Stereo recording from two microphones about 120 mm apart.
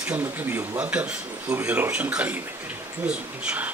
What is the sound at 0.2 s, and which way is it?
A man's voice, 20° right (ahead or behind).